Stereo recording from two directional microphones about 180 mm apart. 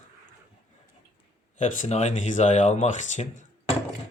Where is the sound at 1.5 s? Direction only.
40° left (ahead or behind).